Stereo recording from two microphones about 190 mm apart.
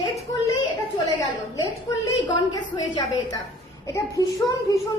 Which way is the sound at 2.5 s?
20° left (ahead or behind).